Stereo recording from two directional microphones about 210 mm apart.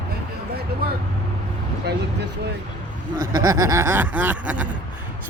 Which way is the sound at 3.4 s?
15° right (ahead or behind).